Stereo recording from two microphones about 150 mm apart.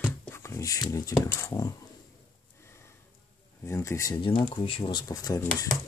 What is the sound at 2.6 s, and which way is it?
Sniff, 15° left (ahead or behind).